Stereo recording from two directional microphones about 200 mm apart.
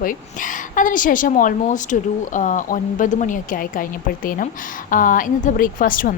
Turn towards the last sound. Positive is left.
turn(degrees=45)  # may be behind; listen again after turning